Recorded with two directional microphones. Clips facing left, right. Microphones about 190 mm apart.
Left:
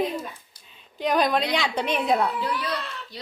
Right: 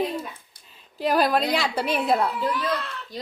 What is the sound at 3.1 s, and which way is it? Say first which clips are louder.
Speech: right 7 dB; 45° right (ahead or behind).